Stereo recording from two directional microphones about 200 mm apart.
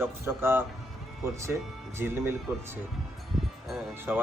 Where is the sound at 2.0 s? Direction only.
10° right (ahead or behind).